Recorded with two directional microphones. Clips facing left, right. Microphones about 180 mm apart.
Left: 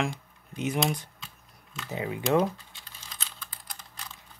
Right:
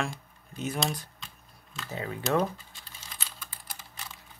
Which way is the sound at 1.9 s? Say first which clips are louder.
Left 3 dB; 15° left (ahead or behind).